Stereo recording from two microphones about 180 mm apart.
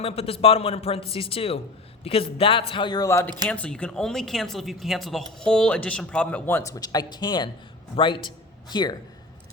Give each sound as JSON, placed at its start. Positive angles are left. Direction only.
{"t": 0.0, "sound": "a man's voice", "side_deg": 35}
{"t": 3.2, "sound": "speech", "side_deg": -20}
{"t": 3.5, "sound": "a woman's voice", "side_deg": 5}